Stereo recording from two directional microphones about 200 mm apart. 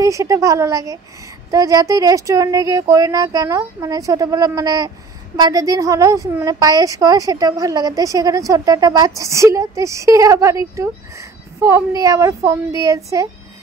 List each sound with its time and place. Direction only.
0.0 s a woman's voice: 15° right (ahead or behind)